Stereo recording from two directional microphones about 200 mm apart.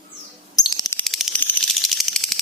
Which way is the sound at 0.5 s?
20° left (ahead or behind).